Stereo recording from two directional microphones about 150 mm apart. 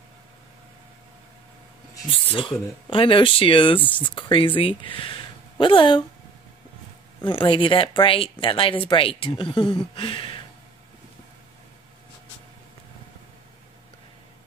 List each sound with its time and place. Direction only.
2.3 s speech: 35° left (ahead or behind)
7.2 s speech: 35° left (ahead or behind)
9.9 s a sound: 35° left (ahead or behind)